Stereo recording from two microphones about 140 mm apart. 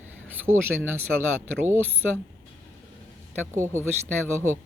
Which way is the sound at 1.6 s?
15° right (ahead or behind).